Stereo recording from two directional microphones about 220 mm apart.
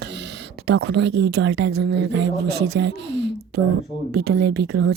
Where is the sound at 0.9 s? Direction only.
50° right (ahead or behind).